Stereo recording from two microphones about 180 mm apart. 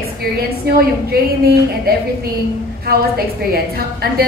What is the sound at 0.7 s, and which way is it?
A woman's voice, 60° right (ahead or behind).